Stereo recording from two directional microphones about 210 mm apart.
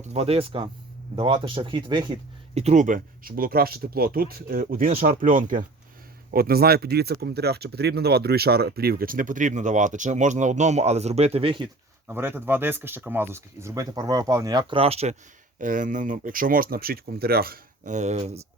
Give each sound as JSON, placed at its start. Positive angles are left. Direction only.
{"t": 0.1, "sound": "speech", "side_deg": -30}
{"t": 2.6, "sound": "speech", "side_deg": -35}
{"t": 12.0, "sound": "speech", "side_deg": -10}